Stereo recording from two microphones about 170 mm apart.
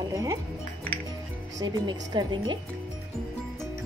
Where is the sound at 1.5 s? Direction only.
25° right (ahead or behind).